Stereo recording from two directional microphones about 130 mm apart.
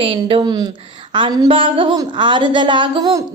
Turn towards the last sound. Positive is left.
turn(degrees=-40)  # may be behind; listen again after turning